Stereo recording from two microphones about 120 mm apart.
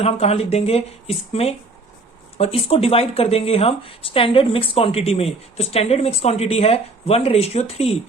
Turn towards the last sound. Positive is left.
turn(degrees=55)  # may be behind; listen again after turning